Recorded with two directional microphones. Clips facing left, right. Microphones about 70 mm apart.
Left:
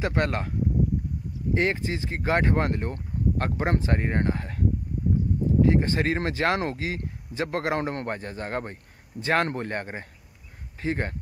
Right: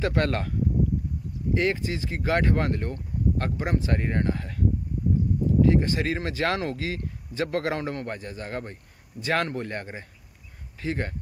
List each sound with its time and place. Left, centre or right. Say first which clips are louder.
0.0 s speech: right 1 dB; left